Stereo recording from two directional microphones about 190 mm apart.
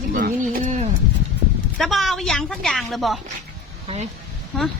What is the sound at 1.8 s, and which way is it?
Speech, centre (ahead or behind).